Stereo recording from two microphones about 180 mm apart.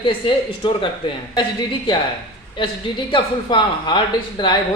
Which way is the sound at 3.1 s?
25° left (ahead or behind).